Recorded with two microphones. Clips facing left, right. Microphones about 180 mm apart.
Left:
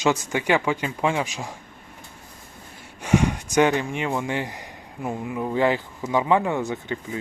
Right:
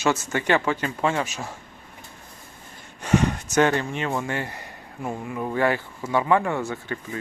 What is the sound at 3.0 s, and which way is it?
Speech, 10° left (ahead or behind).